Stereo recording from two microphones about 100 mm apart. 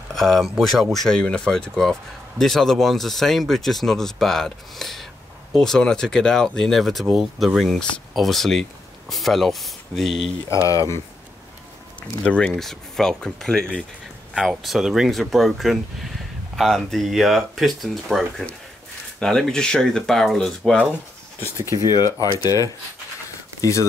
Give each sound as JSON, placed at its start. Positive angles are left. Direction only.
{"t": 0.1, "sound": "speech", "side_deg": 5}
{"t": 10.7, "sound": "speech", "side_deg": 35}
{"t": 12.3, "sound": "speech", "side_deg": 10}
{"t": 21.4, "sound": "speech", "side_deg": -30}
{"t": 21.9, "sound": "speech", "side_deg": 40}